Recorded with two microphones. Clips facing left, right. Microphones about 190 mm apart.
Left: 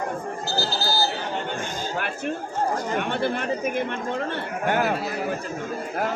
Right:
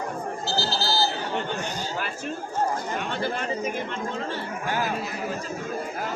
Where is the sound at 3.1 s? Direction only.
60° left (ahead or behind).